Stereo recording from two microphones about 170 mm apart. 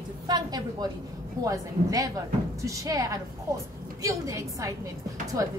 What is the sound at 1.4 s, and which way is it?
A woman's voice, 20° right (ahead or behind).